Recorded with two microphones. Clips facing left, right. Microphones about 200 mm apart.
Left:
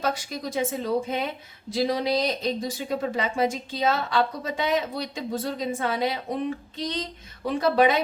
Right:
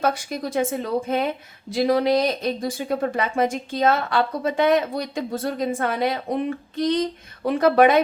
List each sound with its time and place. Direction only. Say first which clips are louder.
0.0 s speech: right 4 dB; 55° right (ahead or behind)